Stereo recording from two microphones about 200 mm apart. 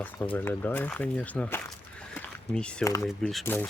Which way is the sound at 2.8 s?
15° left (ahead or behind).